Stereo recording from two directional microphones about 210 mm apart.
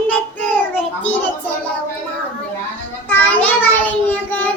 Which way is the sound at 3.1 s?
10° left (ahead or behind).